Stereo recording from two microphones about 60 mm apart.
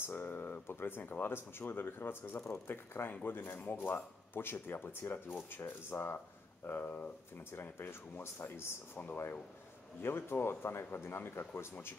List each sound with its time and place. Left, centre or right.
0.0 s speech: left
7.5 s speech: left